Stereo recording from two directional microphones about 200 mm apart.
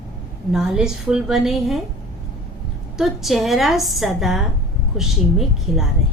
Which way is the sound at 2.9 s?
Centre (ahead or behind).